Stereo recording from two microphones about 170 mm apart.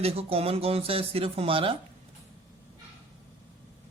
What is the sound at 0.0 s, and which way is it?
Speech, 35° right (ahead or behind).